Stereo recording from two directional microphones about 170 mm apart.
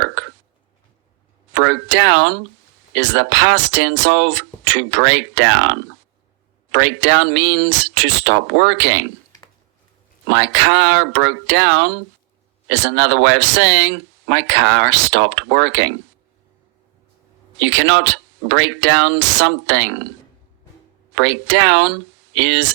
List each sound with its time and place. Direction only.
0.0 s burping: 90° right
1.5 s speech: 90° right
10.2 s speech: 90° right
17.6 s speech: 90° right
21.2 s speech: 90° right